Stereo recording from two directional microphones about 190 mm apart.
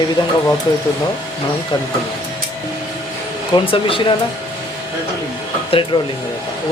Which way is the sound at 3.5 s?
30° left (ahead or behind).